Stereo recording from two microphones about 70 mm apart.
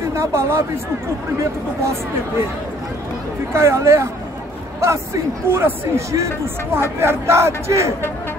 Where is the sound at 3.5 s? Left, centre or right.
Right.